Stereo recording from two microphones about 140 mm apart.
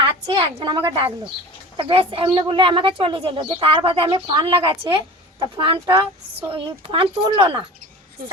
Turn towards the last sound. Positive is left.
turn(degrees=-35)  # may be behind; listen again after turning